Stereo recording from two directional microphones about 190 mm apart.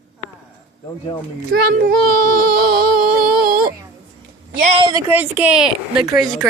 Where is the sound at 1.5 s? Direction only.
55° right (ahead or behind).